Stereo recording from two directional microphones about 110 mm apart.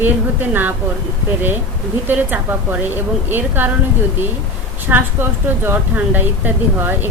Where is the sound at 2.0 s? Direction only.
15° right (ahead or behind).